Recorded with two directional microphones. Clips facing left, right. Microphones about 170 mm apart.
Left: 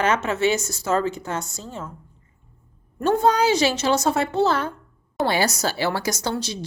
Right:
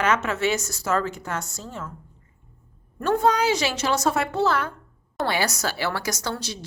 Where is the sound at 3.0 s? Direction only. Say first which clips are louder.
Left 2 dB; 25° left (ahead or behind).